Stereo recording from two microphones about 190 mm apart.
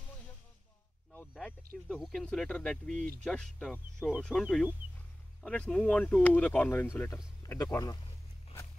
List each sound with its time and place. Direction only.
1.9 s speech: centre (ahead or behind); by 8.0 s 15° left (ahead or behind)